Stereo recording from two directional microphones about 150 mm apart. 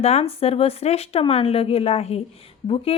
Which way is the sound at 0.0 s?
45° left (ahead or behind).